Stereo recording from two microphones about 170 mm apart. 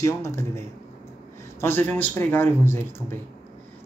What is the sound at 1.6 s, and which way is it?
A man's voice, 10° left (ahead or behind).